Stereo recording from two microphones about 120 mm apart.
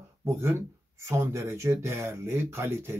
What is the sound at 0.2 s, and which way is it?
Speech, 20° right (ahead or behind).